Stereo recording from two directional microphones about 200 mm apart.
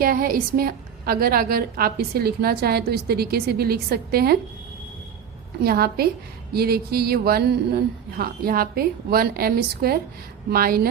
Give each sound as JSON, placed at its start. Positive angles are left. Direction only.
{"t": 0.0, "sound": "a woman's voice", "side_deg": -45}
{"t": 5.6, "sound": "a woman's voice", "side_deg": -50}